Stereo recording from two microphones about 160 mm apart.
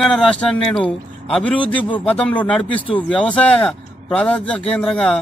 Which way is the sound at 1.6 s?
30° left (ahead or behind).